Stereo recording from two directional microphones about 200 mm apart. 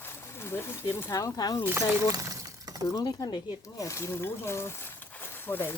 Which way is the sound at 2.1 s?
15° right (ahead or behind).